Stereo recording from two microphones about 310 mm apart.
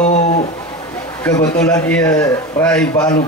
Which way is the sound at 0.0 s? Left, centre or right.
Left.